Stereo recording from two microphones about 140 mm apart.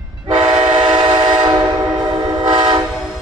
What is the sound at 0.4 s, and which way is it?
Train, 35° right (ahead or behind).